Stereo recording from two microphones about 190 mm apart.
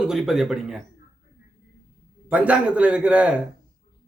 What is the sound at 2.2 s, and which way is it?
Speech, 5° right (ahead or behind).